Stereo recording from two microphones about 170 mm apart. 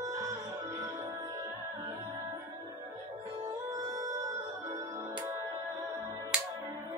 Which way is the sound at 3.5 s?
20° right (ahead or behind).